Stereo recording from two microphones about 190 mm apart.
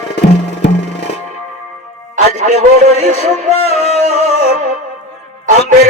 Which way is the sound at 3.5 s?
35° left (ahead or behind).